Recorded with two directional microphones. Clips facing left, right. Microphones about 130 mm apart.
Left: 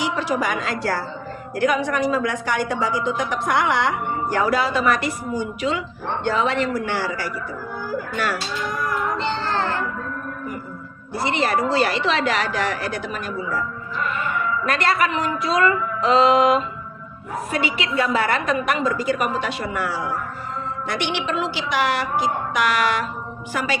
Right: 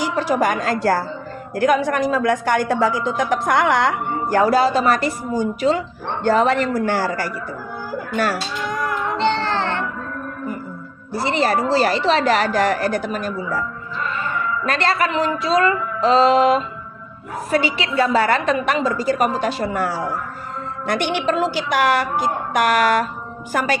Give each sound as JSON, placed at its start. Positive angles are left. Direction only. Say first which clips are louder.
{"t": 0.0, "sound": "a woman's voice", "louder": "right 4 dB", "side_deg": -45}
{"t": 11.1, "sound": "speech", "louder": "right 2 dB", "side_deg": -35}
{"t": 14.6, "sound": "a woman's voice", "louder": "right 1 dB", "side_deg": -30}